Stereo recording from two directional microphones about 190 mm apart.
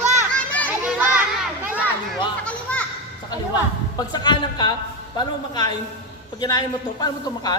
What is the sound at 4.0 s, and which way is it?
A man's voice, 20° left (ahead or behind).